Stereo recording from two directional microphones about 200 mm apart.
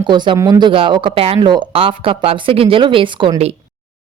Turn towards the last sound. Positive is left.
turn(degrees=-25)  # may be behind; listen again after turning